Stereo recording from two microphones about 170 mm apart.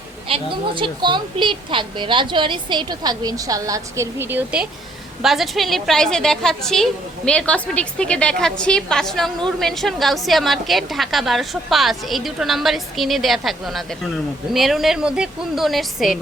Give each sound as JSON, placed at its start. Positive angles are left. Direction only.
{"t": 0.3, "sound": "a woman's voice", "side_deg": -30}